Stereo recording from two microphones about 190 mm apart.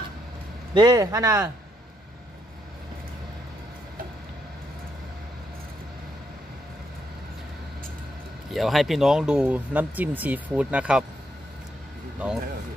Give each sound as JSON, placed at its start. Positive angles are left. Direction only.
{"t": 0.7, "sound": "speech", "side_deg": -20}
{"t": 8.5, "sound": "speech", "side_deg": 0}